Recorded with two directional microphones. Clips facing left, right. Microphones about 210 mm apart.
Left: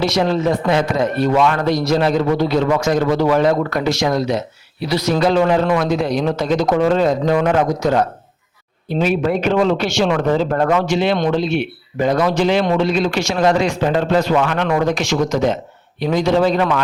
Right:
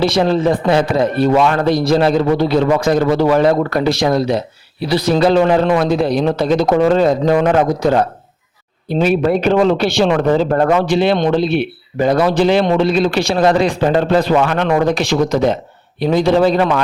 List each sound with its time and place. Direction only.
0.0 s a man's voice: 30° right (ahead or behind)